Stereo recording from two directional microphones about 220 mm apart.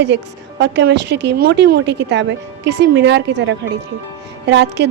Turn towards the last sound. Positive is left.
turn(degrees=-50)  # may be behind; listen again after turning